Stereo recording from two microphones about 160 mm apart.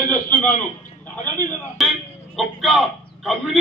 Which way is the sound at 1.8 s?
Centre (ahead or behind).